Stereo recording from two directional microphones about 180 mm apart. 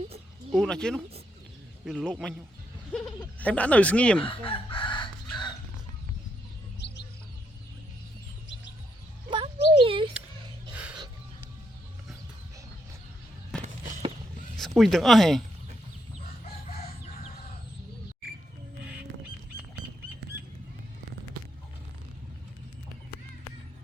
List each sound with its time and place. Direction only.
0.5 s a man's voice: 5° left (ahead or behind)
4.3 s chicken: 30° left (ahead or behind)
6.8 s bird: 70° left (ahead or behind)
9.3 s a sound: 30° right (ahead or behind)
13.6 s a sound: 45° right (ahead or behind)
14.6 s speech: centre (ahead or behind)